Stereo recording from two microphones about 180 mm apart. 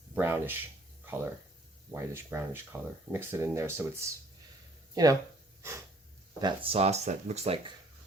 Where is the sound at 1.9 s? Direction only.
15° right (ahead or behind).